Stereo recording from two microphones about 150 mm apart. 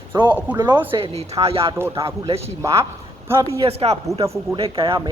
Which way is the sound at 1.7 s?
20° right (ahead or behind).